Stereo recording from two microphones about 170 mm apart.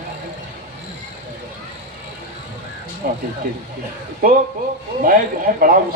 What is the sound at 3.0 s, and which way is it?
Speech, 65° right (ahead or behind).